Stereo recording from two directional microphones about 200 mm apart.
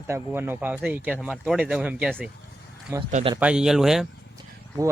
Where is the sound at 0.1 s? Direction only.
10° right (ahead or behind).